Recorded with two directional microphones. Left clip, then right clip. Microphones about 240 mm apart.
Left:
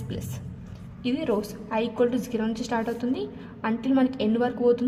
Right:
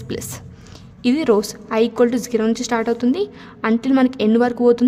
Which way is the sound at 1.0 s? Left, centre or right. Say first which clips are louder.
Right 10 dB; right.